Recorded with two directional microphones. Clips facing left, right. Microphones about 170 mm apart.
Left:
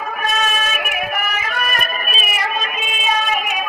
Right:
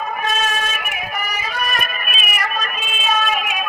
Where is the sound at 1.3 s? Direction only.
55° left (ahead or behind); by 2.7 s 25° left (ahead or behind).